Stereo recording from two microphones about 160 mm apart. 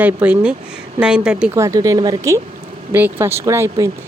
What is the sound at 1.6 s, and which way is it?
Speech, 20° right (ahead or behind).